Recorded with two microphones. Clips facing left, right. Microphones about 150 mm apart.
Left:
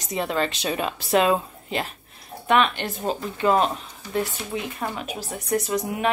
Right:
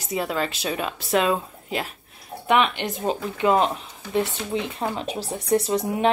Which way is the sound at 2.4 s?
15° right (ahead or behind).